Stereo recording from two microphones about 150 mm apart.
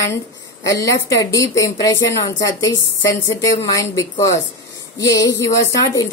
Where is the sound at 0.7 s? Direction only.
20° left (ahead or behind).